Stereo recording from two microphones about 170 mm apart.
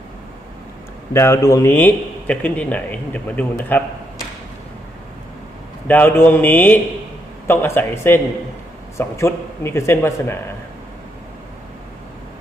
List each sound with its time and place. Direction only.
1.1 s speech: 15° left (ahead or behind)
5.9 s speech: 10° left (ahead or behind)